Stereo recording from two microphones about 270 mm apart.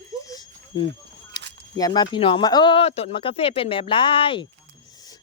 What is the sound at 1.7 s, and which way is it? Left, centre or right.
Speech, centre.